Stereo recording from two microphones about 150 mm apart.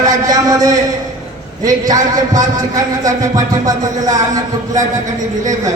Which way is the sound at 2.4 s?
25° right (ahead or behind).